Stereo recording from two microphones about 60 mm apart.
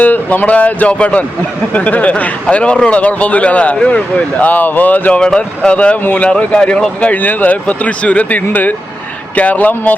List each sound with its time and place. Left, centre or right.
0.0 s speech: left
5.2 s speech: centre
6.5 s speech: centre
7.1 s speech: left